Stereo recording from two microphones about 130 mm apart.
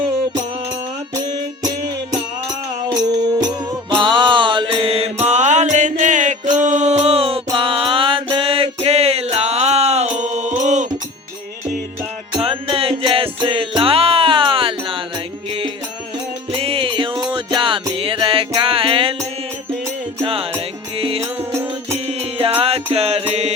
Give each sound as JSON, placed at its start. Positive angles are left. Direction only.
{"t": 1.1, "sound": "music", "side_deg": -30}
{"t": 2.9, "sound": "music", "side_deg": -30}
{"t": 12.4, "sound": "music", "side_deg": -45}
{"t": 16.5, "sound": "music", "side_deg": -45}
{"t": 21.2, "sound": "music", "side_deg": -20}
{"t": 21.9, "sound": "music", "side_deg": -45}
{"t": 23.3, "sound": "mantra", "side_deg": -55}